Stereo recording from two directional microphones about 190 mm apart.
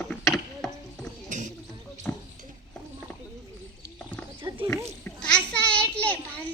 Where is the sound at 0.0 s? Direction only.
5° left (ahead or behind).